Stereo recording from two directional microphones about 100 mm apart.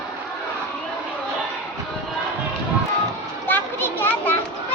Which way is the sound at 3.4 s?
20° left (ahead or behind).